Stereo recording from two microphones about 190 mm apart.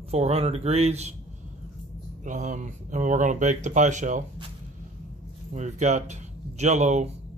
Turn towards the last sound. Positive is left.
turn(degrees=-40)  # may be behind; listen again after turning